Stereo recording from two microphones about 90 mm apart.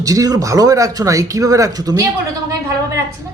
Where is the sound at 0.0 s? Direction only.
40° right (ahead or behind).